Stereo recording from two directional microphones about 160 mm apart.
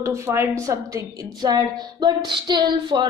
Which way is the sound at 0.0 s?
15° right (ahead or behind).